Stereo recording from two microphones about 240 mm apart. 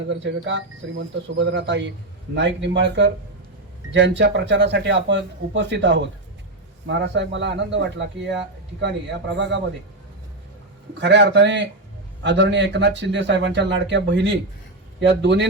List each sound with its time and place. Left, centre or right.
0.0 s a man's voice: right
11.0 s a man's voice: right